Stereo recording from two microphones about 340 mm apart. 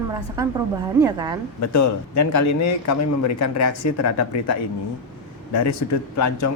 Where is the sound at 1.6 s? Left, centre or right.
Left.